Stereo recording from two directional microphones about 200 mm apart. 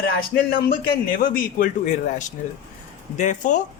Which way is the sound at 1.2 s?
45° left (ahead or behind).